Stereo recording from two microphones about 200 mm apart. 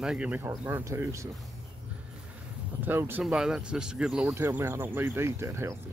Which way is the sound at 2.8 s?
10° right (ahead or behind).